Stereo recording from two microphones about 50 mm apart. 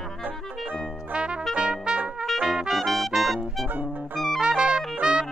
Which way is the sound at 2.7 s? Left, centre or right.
Centre.